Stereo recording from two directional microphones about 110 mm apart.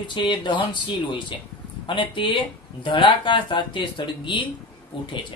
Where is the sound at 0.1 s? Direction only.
45° left (ahead or behind).